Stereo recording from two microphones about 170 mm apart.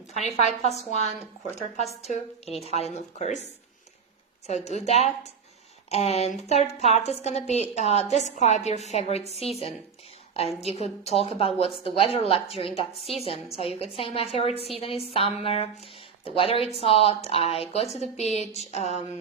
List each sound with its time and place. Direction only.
0.1 s speech: 40° left (ahead or behind)
4.4 s speech: 40° left (ahead or behind)
10.6 s speech: 40° left (ahead or behind)